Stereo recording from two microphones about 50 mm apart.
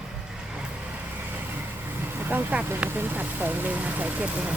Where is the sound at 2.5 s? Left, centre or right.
Right.